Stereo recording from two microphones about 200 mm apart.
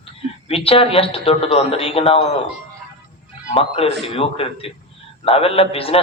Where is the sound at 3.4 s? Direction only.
30° left (ahead or behind).